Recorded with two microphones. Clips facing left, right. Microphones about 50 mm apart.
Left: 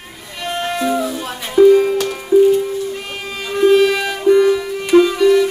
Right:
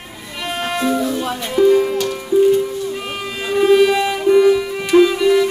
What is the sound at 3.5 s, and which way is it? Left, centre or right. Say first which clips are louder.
Music: even; centre.